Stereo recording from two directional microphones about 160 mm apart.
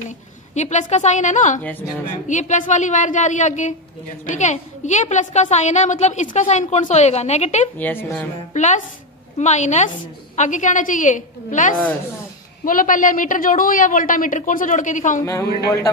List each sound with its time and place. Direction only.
0.6 s a woman's voice: 45° left (ahead or behind)
7.7 s a woman's voice: 10° left (ahead or behind)
8.5 s a woman's voice: 45° left (ahead or behind)
15.2 s speech: 20° left (ahead or behind)